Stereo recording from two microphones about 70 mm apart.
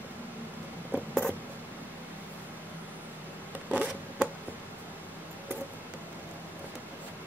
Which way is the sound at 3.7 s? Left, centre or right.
Right.